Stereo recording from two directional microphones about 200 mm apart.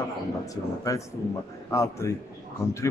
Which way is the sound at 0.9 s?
15° left (ahead or behind).